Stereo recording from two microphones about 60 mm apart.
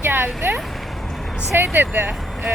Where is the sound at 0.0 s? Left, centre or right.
Right.